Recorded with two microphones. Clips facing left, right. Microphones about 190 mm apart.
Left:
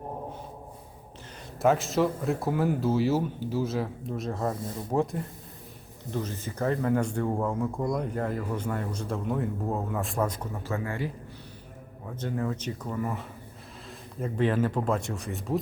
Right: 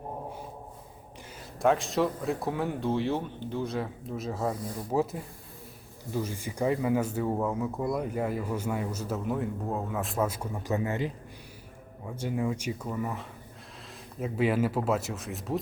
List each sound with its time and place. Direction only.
1.6 s speech: centre (ahead or behind)
4.5 s speech: 25° left (ahead or behind)
4.9 s speech: 5° right (ahead or behind); by 11.1 s 20° right (ahead or behind)
12.0 s speech: 10° right (ahead or behind)